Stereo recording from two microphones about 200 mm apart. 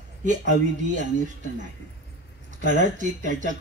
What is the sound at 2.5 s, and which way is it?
Speech, 40° right (ahead or behind).